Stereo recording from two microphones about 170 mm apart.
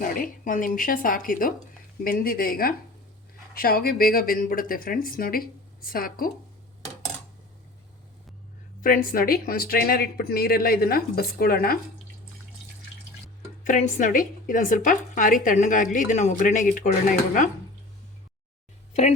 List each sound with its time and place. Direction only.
0.0 s speech: 50° left (ahead or behind)
8.8 s speech: 55° left (ahead or behind)
13.7 s a woman's voice: 45° left (ahead or behind)